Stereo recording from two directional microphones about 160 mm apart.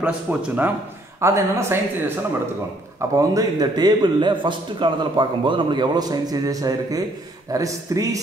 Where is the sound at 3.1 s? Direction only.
25° right (ahead or behind).